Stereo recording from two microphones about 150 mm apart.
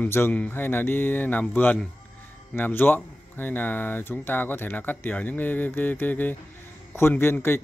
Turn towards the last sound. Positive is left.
turn(degrees=15)  # may be behind; listen again after turning